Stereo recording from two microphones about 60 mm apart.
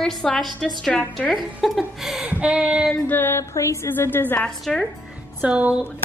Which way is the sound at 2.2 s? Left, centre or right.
Right.